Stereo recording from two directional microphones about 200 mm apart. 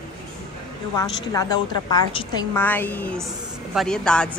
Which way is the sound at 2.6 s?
10° left (ahead or behind).